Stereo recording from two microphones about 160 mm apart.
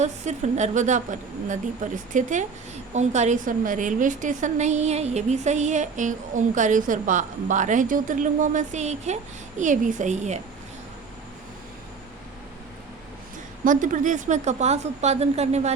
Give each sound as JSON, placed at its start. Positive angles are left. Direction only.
{"t": 0.0, "sound": "a woman's voice", "side_deg": -45}
{"t": 13.7, "sound": "a woman's voice", "side_deg": -55}